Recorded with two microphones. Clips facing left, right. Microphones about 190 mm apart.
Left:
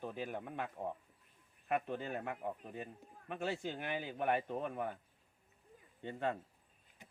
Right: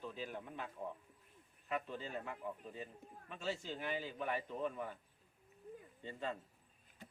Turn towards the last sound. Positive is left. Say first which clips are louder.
# left 5 dB
turn(degrees=60)  # may be behind; listen again after turning